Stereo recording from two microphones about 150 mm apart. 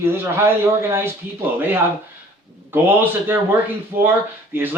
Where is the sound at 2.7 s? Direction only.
15° right (ahead or behind).